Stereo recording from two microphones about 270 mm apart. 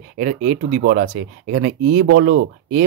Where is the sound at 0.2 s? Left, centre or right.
Right.